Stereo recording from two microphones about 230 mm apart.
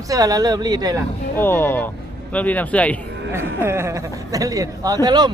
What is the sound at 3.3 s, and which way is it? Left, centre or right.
Speech, centre.